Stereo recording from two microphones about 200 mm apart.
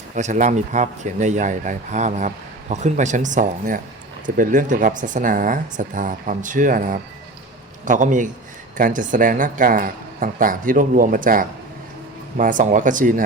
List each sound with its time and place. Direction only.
0.2 s speech: 40° right (ahead or behind)